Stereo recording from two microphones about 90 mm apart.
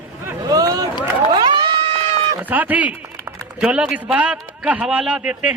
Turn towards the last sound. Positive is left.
turn(degrees=-15)  # may be behind; listen again after turning